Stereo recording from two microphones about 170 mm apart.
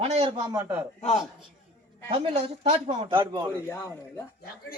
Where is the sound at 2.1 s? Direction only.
35° right (ahead or behind).